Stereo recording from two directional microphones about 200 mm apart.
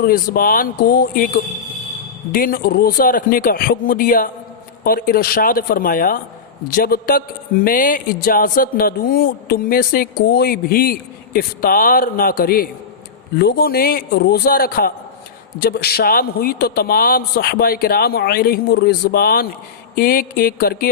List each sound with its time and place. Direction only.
0.0 s a man's voice: 45° left (ahead or behind)
2.3 s a man's voice: 45° left (ahead or behind)